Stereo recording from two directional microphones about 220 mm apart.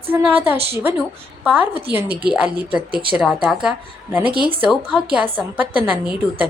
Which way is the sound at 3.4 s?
5° right (ahead or behind).